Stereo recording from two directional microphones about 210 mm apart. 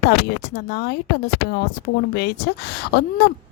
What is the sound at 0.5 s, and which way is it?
Speech, 50° left (ahead or behind).